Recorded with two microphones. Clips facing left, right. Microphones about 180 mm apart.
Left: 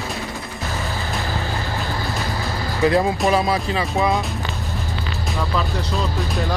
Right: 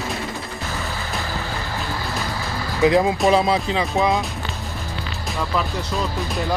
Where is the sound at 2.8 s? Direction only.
15° right (ahead or behind).